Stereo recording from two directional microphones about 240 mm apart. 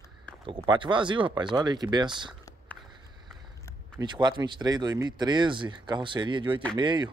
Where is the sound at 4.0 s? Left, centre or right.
Centre.